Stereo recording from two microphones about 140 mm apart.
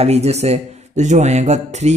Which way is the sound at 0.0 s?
50° right (ahead or behind).